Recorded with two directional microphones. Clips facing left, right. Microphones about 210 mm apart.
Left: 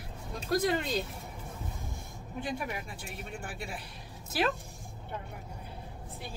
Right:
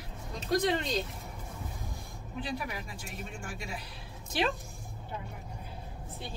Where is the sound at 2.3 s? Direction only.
45° left (ahead or behind).